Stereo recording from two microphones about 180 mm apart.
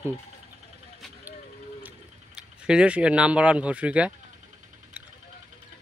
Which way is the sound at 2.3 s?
5° right (ahead or behind).